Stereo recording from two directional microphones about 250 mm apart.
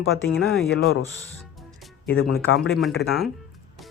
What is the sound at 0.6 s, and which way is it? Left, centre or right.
Speech, left.